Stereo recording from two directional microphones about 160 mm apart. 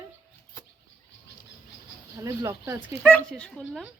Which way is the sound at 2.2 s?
20° right (ahead or behind).